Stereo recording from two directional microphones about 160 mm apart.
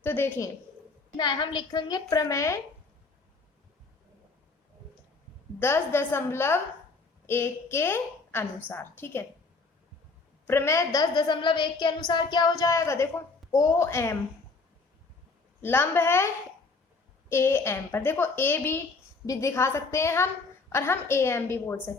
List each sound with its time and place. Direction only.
0.0 s a woman's voice: 15° left (ahead or behind)
1.1 s a woman's voice: 30° left (ahead or behind)
5.5 s a woman's voice: 15° left (ahead or behind)
10.4 s a woman's voice: 15° left (ahead or behind)
15.6 s a woman's voice: 15° left (ahead or behind)